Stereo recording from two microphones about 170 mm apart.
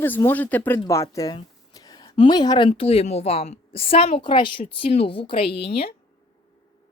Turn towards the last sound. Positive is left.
turn(degrees=35)  # may be behind; listen again after turning